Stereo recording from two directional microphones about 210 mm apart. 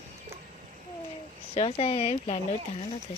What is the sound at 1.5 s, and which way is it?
Speech, 25° left (ahead or behind).